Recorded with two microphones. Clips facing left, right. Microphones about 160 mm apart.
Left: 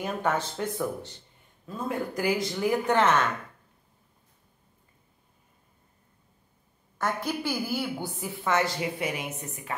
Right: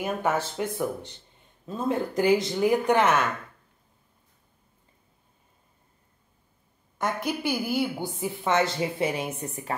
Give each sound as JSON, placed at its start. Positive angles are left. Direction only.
{"t": 0.0, "sound": "speech", "side_deg": -10}
{"t": 1.7, "sound": "a woman's voice", "side_deg": -25}
{"t": 7.0, "sound": "a woman's voice", "side_deg": -15}